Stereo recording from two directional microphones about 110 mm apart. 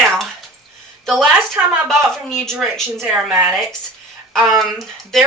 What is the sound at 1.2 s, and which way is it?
Speech, 10° right (ahead or behind).